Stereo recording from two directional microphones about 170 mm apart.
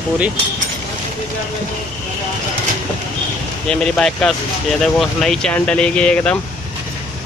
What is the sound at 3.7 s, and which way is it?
Speech, 5° left (ahead or behind).